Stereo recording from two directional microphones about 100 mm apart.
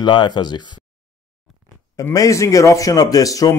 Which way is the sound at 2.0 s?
35° left (ahead or behind).